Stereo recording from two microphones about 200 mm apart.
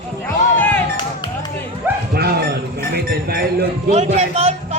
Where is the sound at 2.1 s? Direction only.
50° right (ahead or behind).